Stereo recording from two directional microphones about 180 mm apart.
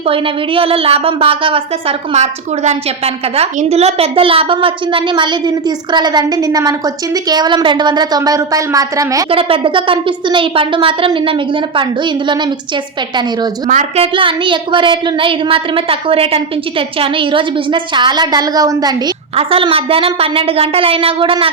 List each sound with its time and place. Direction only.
0.0 s a woman's voice: 30° right (ahead or behind)
9.3 s a woman's voice: 30° right (ahead or behind)
13.7 s a woman's voice: 40° right (ahead or behind)